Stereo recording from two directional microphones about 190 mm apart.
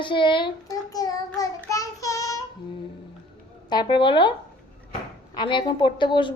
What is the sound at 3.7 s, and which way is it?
Speech, 25° left (ahead or behind).